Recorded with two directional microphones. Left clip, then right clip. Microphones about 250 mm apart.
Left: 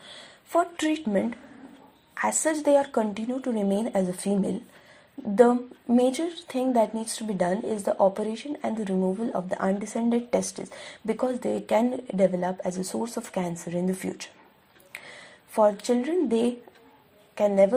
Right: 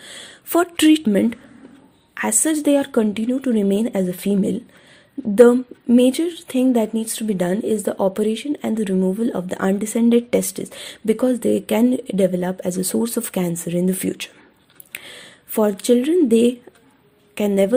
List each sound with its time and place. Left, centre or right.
0.5 s speech: right
6.8 s speech: right
7.1 s speech: right
17.5 s speech: right